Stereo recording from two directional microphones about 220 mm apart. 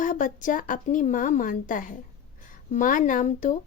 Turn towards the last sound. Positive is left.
turn(degrees=35)  # may be behind; listen again after turning